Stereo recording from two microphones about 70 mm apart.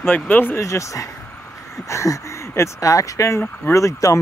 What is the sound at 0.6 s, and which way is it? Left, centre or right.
Speech, left.